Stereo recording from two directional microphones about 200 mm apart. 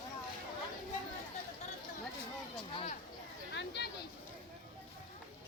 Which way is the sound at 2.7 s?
25° left (ahead or behind).